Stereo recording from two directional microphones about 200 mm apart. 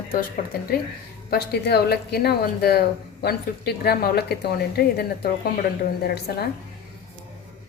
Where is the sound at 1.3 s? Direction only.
55° left (ahead or behind).